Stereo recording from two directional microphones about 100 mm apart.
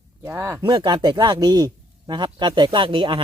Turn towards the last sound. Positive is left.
turn(degrees=-55)  # may be behind; listen again after turning